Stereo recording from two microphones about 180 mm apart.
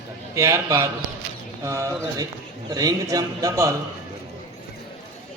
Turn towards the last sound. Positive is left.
turn(degrees=-20)  # may be behind; listen again after turning